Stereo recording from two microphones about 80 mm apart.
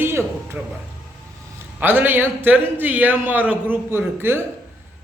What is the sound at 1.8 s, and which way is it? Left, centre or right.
A man's voice, right.